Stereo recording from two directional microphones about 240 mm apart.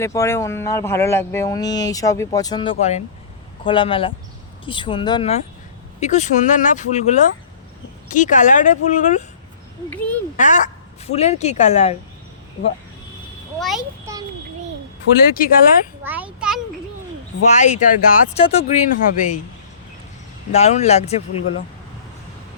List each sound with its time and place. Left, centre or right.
0.0 s speech: centre; by 9.2 s left
10.3 s speech: left
13.6 s a child's voice: centre
15.4 s speech: left
16.0 s a sound: centre
17.4 s speech: left
20.5 s speech: left